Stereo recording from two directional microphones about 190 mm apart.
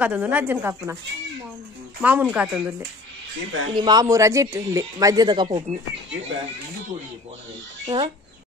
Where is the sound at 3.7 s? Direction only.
25° right (ahead or behind).